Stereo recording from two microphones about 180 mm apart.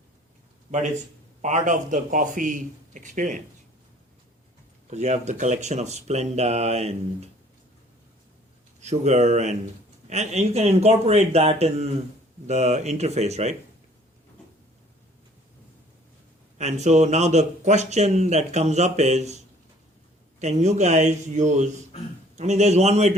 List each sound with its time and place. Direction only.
1.4 s a man's voice: 40° right (ahead or behind)
4.9 s speech: 40° right (ahead or behind)
8.8 s speech: 40° right (ahead or behind)
16.6 s speech: 40° right (ahead or behind)
20.4 s speech: 40° right (ahead or behind)